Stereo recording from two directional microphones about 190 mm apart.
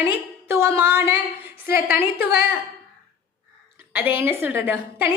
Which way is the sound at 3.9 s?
10° right (ahead or behind).